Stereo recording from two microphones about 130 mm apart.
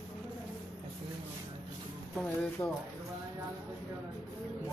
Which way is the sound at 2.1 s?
10° left (ahead or behind).